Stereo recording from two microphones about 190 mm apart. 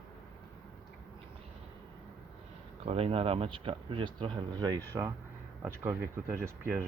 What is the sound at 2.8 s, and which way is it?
Speech, 30° right (ahead or behind).